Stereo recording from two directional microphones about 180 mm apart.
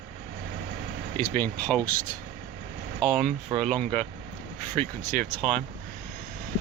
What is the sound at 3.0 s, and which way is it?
Mantra, 5° left (ahead or behind).